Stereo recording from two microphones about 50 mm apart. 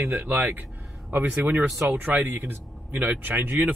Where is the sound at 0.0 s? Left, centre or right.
Right.